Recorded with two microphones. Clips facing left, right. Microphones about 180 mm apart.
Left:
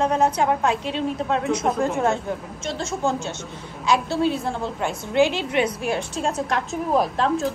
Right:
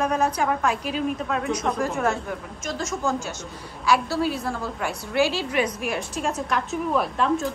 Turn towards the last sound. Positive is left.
turn(degrees=35)  # may be behind; listen again after turning